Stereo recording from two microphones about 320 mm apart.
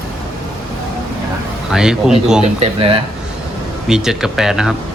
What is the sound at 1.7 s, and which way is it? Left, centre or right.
Speech, centre.